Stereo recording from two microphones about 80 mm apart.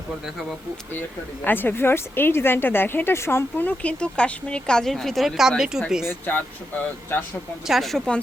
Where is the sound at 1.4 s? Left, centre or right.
Left.